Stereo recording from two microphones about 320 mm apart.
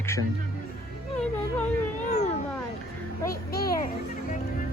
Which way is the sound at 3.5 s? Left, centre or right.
Left.